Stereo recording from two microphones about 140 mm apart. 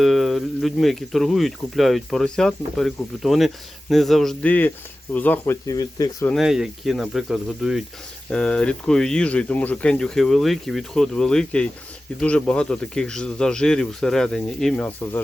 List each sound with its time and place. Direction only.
0.0 s speech: centre (ahead or behind)
5.1 s speech: 10° left (ahead or behind)
5.6 s speech: 25° left (ahead or behind)
6.3 s speech: 5° right (ahead or behind)